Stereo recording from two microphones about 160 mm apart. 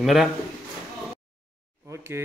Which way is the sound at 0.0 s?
Centre (ahead or behind).